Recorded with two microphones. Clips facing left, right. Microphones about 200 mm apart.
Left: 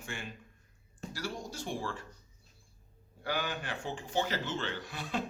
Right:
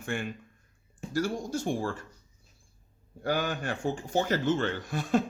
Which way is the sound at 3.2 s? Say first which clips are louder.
Right 6 dB; 45° right (ahead or behind).